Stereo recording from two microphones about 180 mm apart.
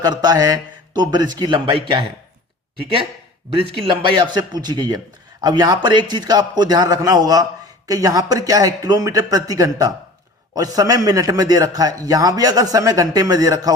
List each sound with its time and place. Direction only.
0.0 s a man's voice: 20° right (ahead or behind)
3.8 s a man's voice: 25° right (ahead or behind)